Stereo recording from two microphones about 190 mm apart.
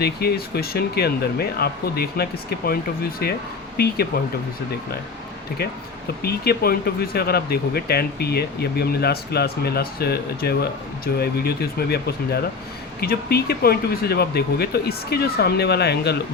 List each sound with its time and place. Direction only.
0.0 s speech: 55° left (ahead or behind)
6.2 s speech: 55° left (ahead or behind)